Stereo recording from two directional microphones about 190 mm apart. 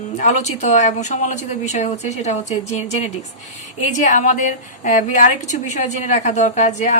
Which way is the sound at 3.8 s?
40° left (ahead or behind).